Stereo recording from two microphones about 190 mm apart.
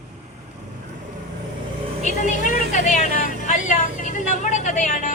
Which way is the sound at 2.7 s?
40° left (ahead or behind).